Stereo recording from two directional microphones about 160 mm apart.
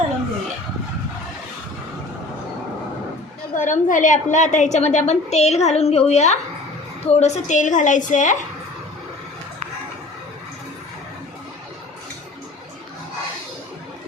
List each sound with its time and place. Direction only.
3.5 s a woman's voice: 55° left (ahead or behind)